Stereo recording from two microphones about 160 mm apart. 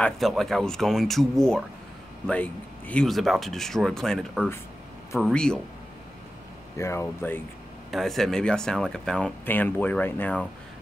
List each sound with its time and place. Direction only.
0.0 s speech: centre (ahead or behind)
6.8 s speech: 15° left (ahead or behind)
7.9 s speech: centre (ahead or behind)